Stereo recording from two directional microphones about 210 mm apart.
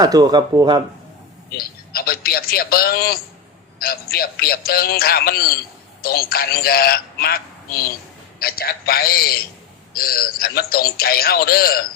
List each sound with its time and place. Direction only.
0.0 s speech: 15° right (ahead or behind)
1.5 s a man's voice: 45° left (ahead or behind)